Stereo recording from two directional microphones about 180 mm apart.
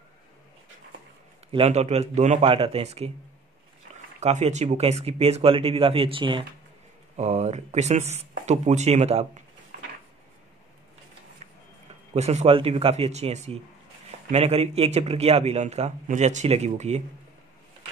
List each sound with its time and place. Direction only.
1.5 s a man's voice: 35° right (ahead or behind)
4.2 s a man's voice: 40° right (ahead or behind)
7.2 s a man's voice: 40° right (ahead or behind)
12.1 s a man's voice: 35° right (ahead or behind)